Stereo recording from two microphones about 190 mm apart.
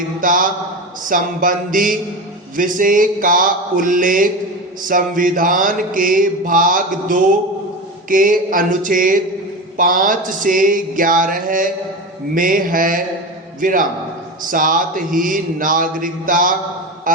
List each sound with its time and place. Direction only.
0.2 s mantra: 45° right (ahead or behind)